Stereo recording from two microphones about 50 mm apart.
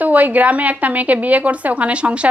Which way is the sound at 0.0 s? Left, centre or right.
Right.